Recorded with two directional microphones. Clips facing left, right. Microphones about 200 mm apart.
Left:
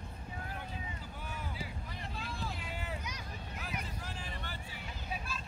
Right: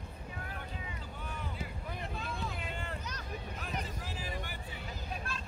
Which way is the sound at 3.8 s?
5° right (ahead or behind).